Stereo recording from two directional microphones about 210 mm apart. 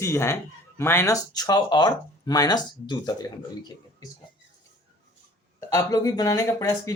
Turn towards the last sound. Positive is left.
turn(degrees=15)  # may be behind; listen again after turning